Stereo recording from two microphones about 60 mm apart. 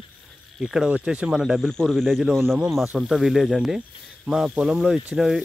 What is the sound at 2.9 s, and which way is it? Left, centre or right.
Speech, centre.